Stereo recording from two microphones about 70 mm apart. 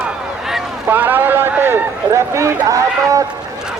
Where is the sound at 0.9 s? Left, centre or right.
Right.